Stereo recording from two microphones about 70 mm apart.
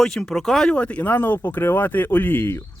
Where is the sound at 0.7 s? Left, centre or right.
Centre.